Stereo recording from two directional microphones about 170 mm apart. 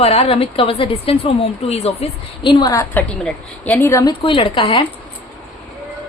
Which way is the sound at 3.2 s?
5° left (ahead or behind).